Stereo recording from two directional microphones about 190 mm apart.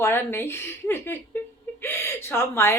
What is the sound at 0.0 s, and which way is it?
A woman's voice, 10° left (ahead or behind).